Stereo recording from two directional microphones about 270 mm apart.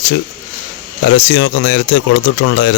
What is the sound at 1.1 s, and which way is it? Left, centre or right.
Speech, left.